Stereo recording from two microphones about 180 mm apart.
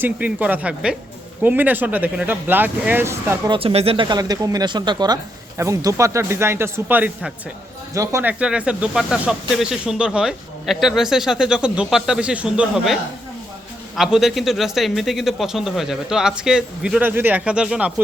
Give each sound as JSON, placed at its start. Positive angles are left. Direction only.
{"t": 0.0, "sound": "speech", "side_deg": -10}
{"t": 3.5, "sound": "speech", "side_deg": -30}